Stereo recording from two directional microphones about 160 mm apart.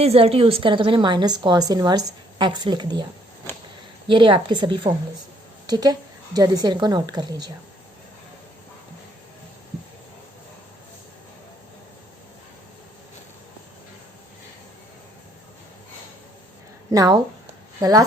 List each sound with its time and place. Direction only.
0.0 s a woman's voice: 40° right (ahead or behind)
4.1 s a woman's voice: 30° right (ahead or behind)
16.9 s a woman's voice: 25° right (ahead or behind)